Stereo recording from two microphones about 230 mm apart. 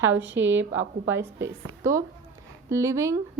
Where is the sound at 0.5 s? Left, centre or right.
Centre.